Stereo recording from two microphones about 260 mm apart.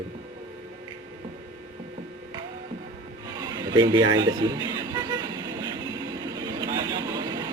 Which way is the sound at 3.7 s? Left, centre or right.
Centre.